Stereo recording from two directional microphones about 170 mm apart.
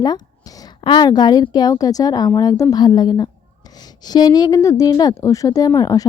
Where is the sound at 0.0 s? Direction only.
20° left (ahead or behind).